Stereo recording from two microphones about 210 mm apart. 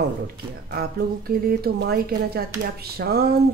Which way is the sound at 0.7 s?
50° right (ahead or behind).